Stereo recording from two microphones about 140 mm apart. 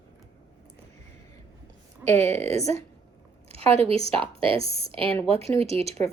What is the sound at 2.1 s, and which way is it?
A woman's voice, 50° right (ahead or behind).